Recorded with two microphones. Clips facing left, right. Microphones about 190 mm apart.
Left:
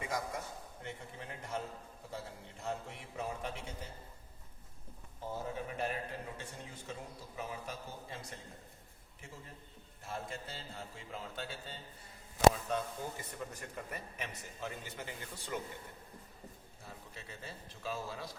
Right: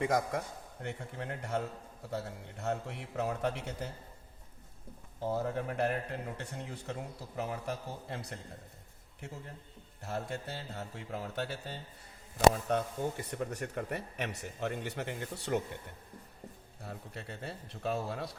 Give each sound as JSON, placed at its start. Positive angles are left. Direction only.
{"t": 0.0, "sound": "speech", "side_deg": -65}
{"t": 5.2, "sound": "a man's voice", "side_deg": -65}
{"t": 10.0, "sound": "a man's voice", "side_deg": -65}
{"t": 16.8, "sound": "a man's voice", "side_deg": -60}